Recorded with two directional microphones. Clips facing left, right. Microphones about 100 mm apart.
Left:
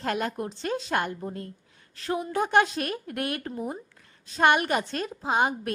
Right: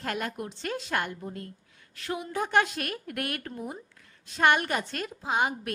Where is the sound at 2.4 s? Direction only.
25° left (ahead or behind).